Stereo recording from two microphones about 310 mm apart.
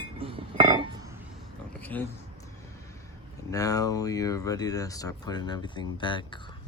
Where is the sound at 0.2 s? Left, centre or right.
Centre.